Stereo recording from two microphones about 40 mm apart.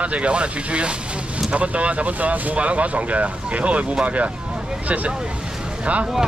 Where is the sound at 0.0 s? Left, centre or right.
Right.